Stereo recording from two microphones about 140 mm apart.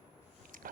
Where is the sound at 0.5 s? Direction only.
75° right (ahead or behind).